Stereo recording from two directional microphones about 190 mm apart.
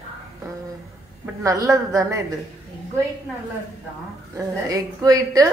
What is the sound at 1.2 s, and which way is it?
A woman's voice, 15° right (ahead or behind).